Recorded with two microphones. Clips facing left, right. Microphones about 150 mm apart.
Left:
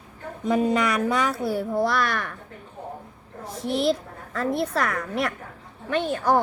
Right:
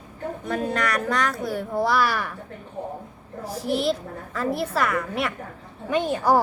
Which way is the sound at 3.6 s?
Centre (ahead or behind).